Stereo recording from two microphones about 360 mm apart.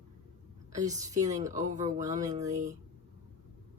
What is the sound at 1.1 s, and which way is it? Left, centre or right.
A woman's voice, centre.